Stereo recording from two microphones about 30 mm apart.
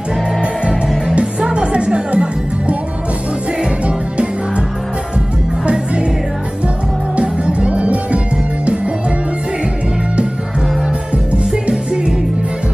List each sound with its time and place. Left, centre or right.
1.1 s music: right
3.6 s music: right
7.2 s music: right